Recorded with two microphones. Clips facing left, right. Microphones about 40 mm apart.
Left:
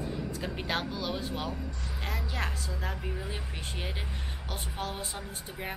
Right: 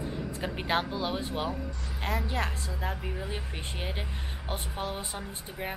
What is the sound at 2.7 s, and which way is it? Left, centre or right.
A woman's voice, centre.